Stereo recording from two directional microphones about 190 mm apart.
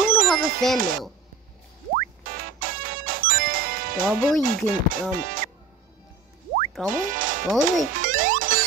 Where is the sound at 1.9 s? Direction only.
50° right (ahead or behind).